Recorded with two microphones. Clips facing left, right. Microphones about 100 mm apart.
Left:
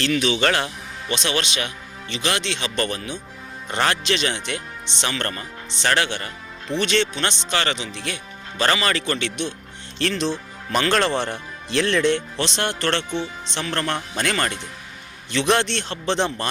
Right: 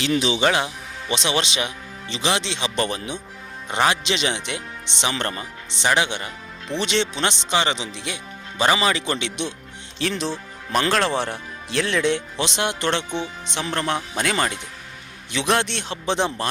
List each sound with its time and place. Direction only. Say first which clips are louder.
0.1 s speech: right 3 dB; 20° right (ahead or behind)
0.4 s music: right 1 dB; 10° right (ahead or behind)
1.1 s speech: right 1 dB; 20° right (ahead or behind)
10.0 s speech: left 2 dB; 5° right (ahead or behind)